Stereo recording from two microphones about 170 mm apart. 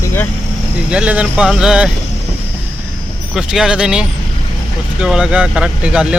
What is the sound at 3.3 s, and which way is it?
Speech, 5° right (ahead or behind).